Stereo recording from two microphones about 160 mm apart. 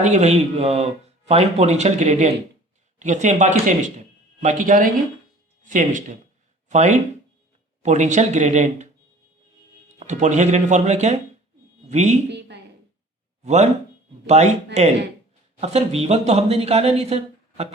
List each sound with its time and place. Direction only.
0.0 s speech: 45° right (ahead or behind)
10.0 s speech: 45° right (ahead or behind)
12.3 s a sound: 90° right
13.4 s speech: 45° right (ahead or behind)